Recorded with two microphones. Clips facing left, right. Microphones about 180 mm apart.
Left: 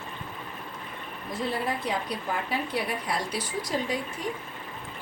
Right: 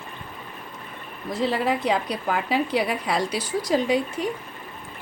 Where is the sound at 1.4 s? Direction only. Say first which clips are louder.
Right 6 dB; 90° right.